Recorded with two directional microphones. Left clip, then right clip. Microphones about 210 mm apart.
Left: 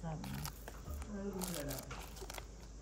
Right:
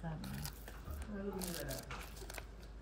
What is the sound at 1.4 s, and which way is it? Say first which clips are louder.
Crumpling: left 1 dB; centre (ahead or behind).